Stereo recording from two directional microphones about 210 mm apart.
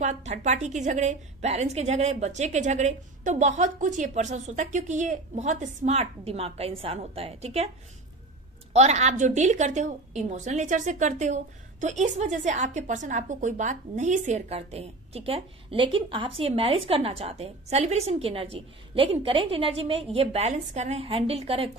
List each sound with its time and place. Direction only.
0.0 s a woman's voice: 35° right (ahead or behind)
8.7 s a woman's voice: 35° right (ahead or behind)